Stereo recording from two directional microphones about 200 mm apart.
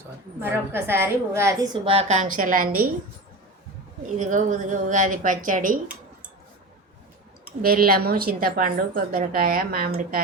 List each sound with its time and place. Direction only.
0.3 s a woman's voice: 10° right (ahead or behind)
1.8 s a woman's voice: 30° right (ahead or behind); by 2.9 s 45° right (ahead or behind)
4.2 s a woman's voice: 40° right (ahead or behind)
7.6 s a woman's voice: 45° right (ahead or behind)